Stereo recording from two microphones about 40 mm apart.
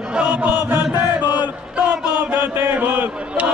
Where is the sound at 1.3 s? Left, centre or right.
Right.